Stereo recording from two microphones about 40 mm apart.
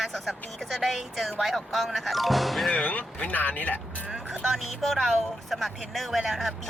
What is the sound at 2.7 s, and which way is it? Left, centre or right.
Speech, left.